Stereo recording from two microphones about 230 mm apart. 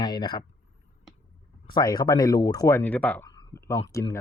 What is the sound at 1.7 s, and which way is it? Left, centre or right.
Speech, centre.